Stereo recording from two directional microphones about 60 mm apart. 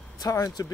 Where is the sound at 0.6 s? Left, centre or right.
Left.